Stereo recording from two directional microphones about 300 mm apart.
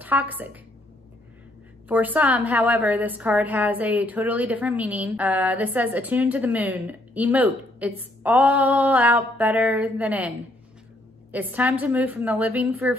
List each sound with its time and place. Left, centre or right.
0.0 s a woman's voice: centre
1.9 s a woman's voice: centre
11.3 s a woman's voice: centre